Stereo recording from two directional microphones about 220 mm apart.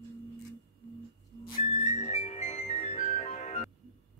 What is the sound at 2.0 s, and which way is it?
Music, 30° left (ahead or behind).